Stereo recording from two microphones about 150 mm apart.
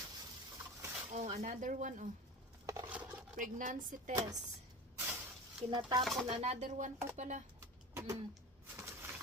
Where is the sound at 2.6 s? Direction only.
20° right (ahead or behind).